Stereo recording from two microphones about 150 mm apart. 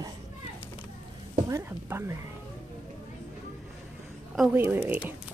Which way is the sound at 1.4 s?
20° right (ahead or behind).